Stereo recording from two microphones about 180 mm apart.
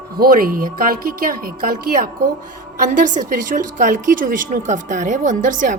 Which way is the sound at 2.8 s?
45° right (ahead or behind).